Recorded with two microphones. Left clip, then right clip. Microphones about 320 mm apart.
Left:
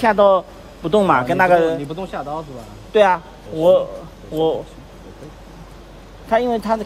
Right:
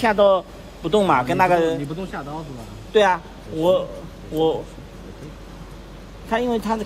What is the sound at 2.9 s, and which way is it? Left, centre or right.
A man's voice, left.